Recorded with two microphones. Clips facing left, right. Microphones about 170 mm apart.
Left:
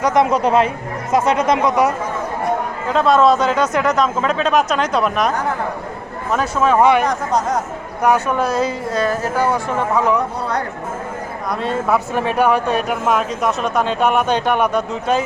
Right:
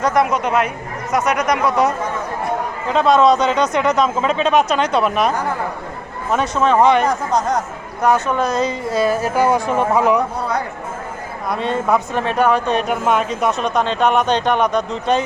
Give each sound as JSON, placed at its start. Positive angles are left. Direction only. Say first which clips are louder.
{"t": 0.0, "sound": "speech", "louder": "left 2 dB", "side_deg": 20}
{"t": 2.9, "sound": "speech", "louder": "even", "side_deg": 0}
{"t": 6.3, "sound": "speech", "louder": "even", "side_deg": 5}
{"t": 8.9, "sound": "speech", "louder": "right 2 dB", "side_deg": -10}
{"t": 11.4, "sound": "speech", "louder": "right 1 dB", "side_deg": 0}